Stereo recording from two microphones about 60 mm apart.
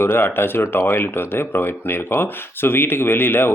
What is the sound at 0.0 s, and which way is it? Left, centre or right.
Speech, left.